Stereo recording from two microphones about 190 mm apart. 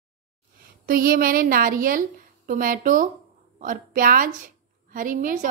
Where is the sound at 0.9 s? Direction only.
50° right (ahead or behind).